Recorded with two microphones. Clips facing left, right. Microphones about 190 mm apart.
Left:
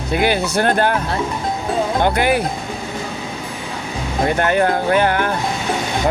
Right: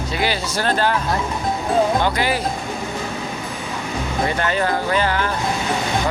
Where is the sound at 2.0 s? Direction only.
55° left (ahead or behind).